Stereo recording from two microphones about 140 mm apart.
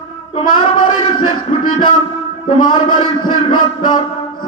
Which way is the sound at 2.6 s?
35° left (ahead or behind).